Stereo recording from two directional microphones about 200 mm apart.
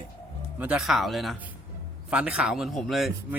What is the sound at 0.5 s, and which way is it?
Speech, 5° right (ahead or behind).